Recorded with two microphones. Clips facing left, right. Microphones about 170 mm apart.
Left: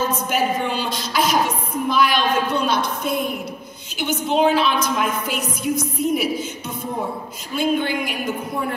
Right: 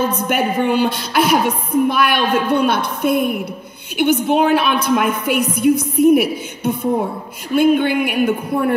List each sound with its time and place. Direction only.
0.0 s a woman's voice: 60° right (ahead or behind)